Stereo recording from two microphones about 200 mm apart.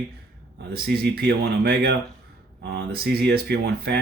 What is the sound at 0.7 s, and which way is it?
Speech, 50° right (ahead or behind).